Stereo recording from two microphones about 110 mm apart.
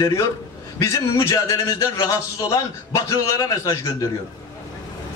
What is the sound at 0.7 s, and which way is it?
A man's voice, 30° left (ahead or behind).